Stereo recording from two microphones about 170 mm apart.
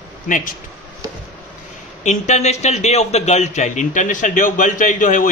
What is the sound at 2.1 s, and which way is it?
A man's voice, 40° left (ahead or behind).